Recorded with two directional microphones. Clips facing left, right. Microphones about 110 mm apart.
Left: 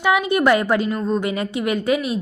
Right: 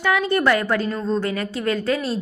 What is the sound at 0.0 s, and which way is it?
A woman's voice, 15° left (ahead or behind).